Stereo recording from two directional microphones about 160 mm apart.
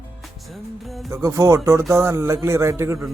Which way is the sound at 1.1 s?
20° right (ahead or behind).